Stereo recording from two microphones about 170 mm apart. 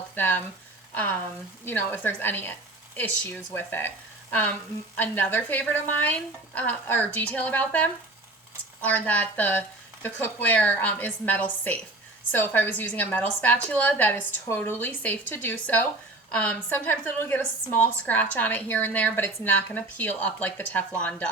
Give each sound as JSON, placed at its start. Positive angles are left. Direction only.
{"t": 0.2, "sound": "a woman's voice", "side_deg": 10}
{"t": 1.6, "sound": "a woman's voice", "side_deg": 10}